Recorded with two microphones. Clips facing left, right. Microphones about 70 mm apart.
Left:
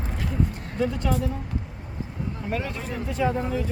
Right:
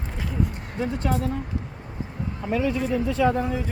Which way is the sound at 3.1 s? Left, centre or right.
Right.